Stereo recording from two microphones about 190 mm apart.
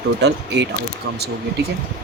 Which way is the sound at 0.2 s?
65° right (ahead or behind).